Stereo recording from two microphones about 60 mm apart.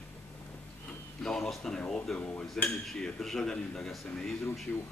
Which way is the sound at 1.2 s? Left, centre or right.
Centre.